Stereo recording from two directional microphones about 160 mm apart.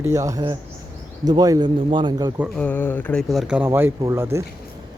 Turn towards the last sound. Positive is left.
turn(degrees=-15)  # may be behind; listen again after turning